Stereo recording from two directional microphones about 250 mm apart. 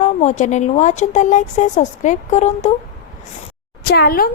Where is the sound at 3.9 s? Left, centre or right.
Left.